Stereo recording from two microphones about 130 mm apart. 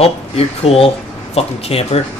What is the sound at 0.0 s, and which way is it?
Speech, 50° left (ahead or behind).